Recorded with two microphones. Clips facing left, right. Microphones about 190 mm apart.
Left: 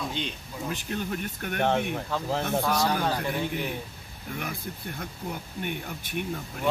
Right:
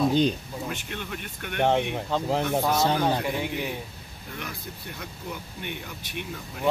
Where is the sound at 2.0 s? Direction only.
20° right (ahead or behind).